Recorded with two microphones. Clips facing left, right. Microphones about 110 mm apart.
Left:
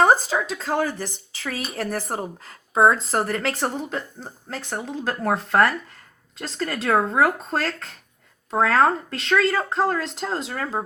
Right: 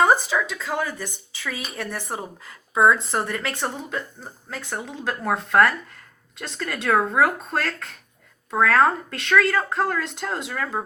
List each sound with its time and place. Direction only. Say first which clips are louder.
0.0 s speech: left 1 dB; 30° left (ahead or behind)